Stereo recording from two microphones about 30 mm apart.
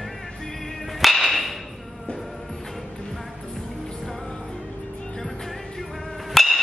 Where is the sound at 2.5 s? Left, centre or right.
Centre.